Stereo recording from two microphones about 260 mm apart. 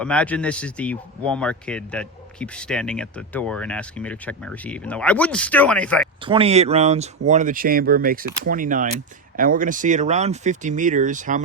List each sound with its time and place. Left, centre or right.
0.0 s a man's voice: centre
6.2 s speech: right